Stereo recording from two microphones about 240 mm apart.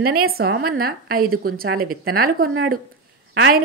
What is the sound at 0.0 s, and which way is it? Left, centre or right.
A woman's voice, right.